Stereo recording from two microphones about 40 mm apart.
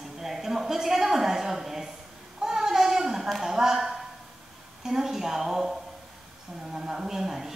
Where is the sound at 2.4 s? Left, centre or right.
Centre.